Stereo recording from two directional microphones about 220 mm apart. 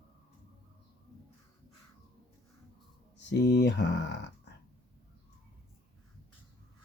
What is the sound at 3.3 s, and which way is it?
Speech, 50° left (ahead or behind).